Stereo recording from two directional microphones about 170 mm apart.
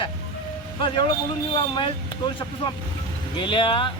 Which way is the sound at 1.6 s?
30° left (ahead or behind).